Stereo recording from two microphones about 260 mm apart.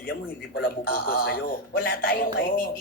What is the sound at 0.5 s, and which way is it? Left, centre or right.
Speech, left.